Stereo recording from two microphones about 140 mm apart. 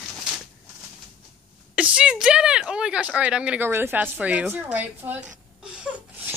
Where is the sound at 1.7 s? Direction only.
5° right (ahead or behind).